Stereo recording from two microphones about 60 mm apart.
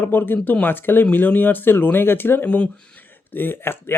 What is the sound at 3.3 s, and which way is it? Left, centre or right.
Speech, left.